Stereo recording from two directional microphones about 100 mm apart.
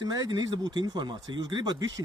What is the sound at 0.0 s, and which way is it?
Speech, 40° right (ahead or behind).